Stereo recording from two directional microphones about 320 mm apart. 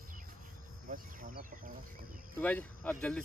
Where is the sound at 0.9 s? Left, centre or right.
Right.